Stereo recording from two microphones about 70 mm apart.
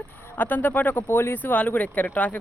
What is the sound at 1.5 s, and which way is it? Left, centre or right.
Speech, left.